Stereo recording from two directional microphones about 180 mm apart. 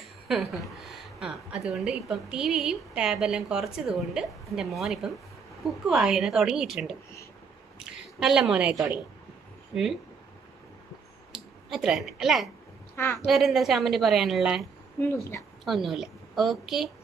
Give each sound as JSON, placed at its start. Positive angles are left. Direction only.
{"t": 0.3, "sound": "a woman's voice", "side_deg": 0}
{"t": 8.2, "sound": "a woman's voice", "side_deg": 0}
{"t": 11.3, "sound": "speech", "side_deg": 0}
{"t": 12.9, "sound": "a woman's voice", "side_deg": 15}
{"t": 13.2, "sound": "a woman's voice", "side_deg": 0}
{"t": 15.6, "sound": "a woman's voice", "side_deg": 0}